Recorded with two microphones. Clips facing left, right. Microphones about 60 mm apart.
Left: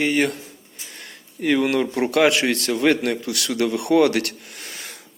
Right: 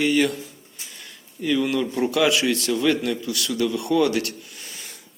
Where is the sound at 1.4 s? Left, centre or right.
Left.